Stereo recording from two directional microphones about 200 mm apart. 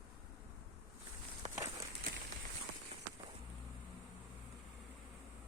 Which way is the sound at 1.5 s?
15° right (ahead or behind).